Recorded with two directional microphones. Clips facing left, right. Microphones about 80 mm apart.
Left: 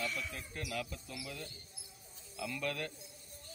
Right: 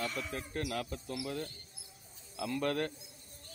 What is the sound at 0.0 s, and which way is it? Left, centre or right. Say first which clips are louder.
Speech: right 3 dB; right.